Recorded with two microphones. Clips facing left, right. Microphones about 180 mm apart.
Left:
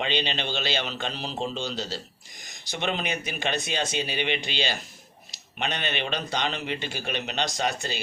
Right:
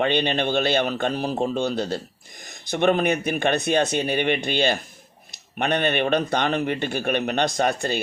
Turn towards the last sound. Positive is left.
turn(degrees=-55)  # may be behind; listen again after turning